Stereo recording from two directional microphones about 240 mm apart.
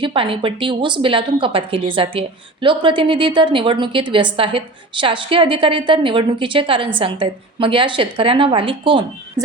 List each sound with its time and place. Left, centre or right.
0.0 s a woman's voice: right